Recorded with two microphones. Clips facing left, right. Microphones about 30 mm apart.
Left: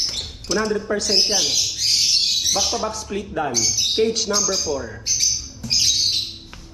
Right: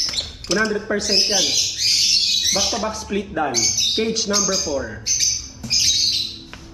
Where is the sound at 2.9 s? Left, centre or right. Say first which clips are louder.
Right 3 dB; right.